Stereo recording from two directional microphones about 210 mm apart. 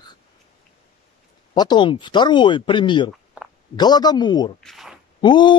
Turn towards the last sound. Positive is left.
turn(degrees=20)  # may be behind; listen again after turning